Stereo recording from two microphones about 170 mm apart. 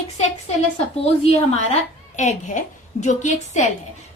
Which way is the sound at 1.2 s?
40° left (ahead or behind).